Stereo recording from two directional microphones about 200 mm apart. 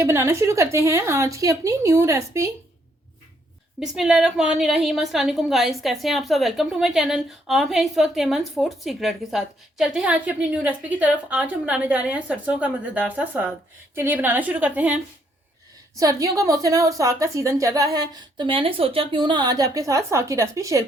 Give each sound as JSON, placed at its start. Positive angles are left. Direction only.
{"t": 0.0, "sound": "a woman's voice", "side_deg": -15}
{"t": 3.8, "sound": "a woman's voice", "side_deg": -5}
{"t": 16.0, "sound": "a woman's voice", "side_deg": -15}